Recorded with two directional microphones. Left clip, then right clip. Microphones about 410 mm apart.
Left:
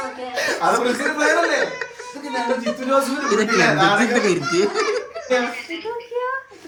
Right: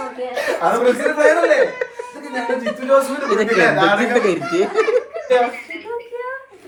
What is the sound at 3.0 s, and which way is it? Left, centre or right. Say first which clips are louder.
Speech: right 2 dB; centre.